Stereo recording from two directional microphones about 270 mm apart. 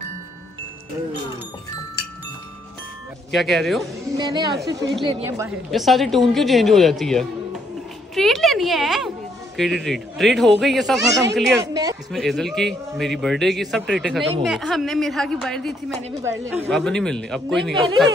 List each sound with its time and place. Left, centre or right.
3.3 s a man's voice: centre
4.2 s a woman's voice: centre
11.7 s a sound: centre
12.1 s a man's voice: centre